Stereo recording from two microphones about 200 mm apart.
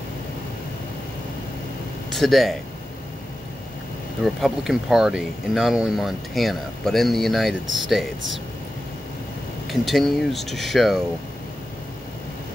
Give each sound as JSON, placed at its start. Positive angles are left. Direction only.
{"t": 2.1, "sound": "speech", "side_deg": 0}
{"t": 4.2, "sound": "speech", "side_deg": 0}
{"t": 9.7, "sound": "speech", "side_deg": 0}